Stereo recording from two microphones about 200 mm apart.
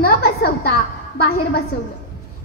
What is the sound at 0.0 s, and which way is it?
A woman's voice, 50° left (ahead or behind).